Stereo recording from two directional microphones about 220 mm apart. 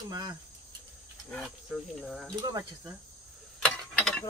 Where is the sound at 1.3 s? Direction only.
5° left (ahead or behind).